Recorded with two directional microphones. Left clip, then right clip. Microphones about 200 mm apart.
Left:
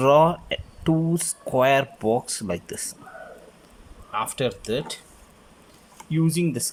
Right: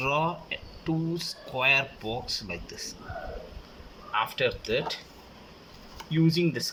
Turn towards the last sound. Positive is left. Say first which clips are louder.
# left 1 dB
turn(degrees=25)  # may be behind; listen again after turning